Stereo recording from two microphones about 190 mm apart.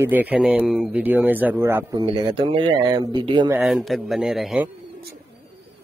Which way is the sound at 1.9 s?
20° right (ahead or behind).